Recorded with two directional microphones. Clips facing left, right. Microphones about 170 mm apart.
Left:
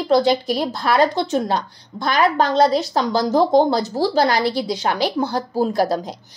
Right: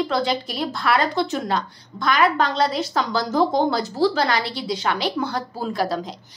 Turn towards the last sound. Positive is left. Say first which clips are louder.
# left 6 dB
turn(degrees=35)  # may be behind; listen again after turning